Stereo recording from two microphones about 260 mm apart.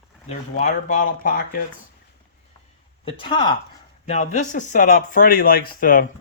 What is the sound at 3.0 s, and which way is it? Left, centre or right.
Speech, centre.